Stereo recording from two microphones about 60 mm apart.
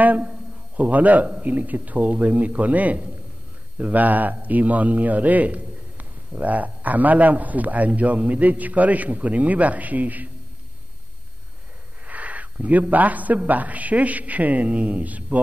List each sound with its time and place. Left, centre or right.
0.0 s a man's voice: right
12.1 s a man's voice: right